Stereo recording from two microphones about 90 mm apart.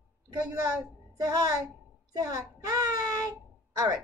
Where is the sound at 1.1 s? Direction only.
45° right (ahead or behind).